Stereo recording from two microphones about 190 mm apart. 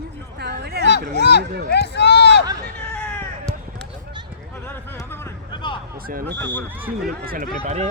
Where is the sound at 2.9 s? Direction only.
5° left (ahead or behind).